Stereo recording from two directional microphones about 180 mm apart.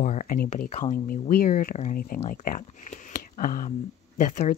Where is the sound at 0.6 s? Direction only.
35° left (ahead or behind).